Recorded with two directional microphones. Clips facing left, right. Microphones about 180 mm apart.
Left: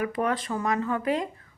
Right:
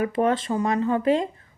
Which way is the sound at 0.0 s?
25° right (ahead or behind).